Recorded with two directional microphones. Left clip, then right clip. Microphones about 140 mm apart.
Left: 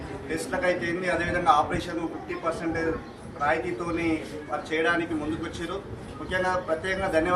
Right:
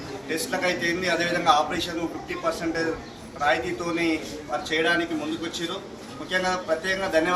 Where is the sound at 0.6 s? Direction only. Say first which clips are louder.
Even; 10° left (ahead or behind).